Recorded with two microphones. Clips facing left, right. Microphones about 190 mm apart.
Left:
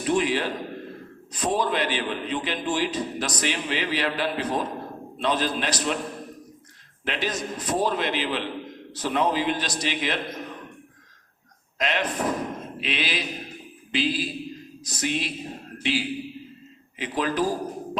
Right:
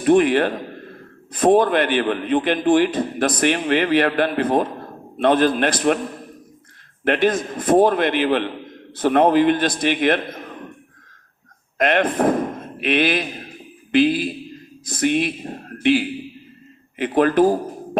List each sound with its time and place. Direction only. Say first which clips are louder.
0.0 s a man's voice: right 9 dB; 55° right (ahead or behind)
7.0 s a man's voice: right 11 dB; 55° right (ahead or behind)
11.8 s a man's voice: right 9 dB; 55° right (ahead or behind)